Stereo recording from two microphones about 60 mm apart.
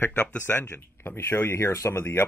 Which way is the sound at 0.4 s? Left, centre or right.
Left.